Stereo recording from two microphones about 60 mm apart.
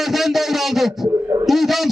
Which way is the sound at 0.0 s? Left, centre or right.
Centre.